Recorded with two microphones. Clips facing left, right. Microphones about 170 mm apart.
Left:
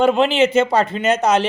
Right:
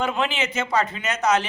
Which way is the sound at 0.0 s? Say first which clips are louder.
Left 10 dB; 30° left (ahead or behind).